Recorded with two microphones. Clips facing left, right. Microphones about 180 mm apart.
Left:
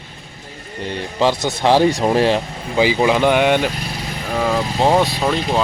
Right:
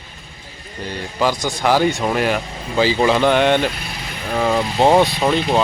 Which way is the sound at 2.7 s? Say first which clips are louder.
Left 1 dB; 15° left (ahead or behind).